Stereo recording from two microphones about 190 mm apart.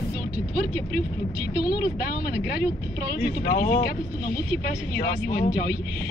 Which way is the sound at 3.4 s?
50° left (ahead or behind).